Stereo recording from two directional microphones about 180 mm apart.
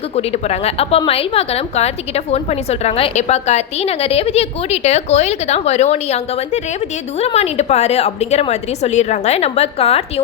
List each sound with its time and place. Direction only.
0.2 s a woman's voice: 35° left (ahead or behind)